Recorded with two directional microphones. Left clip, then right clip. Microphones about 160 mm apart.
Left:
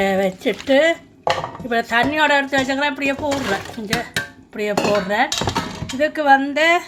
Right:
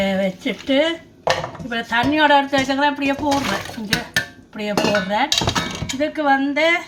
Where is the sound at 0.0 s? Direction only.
50° left (ahead or behind).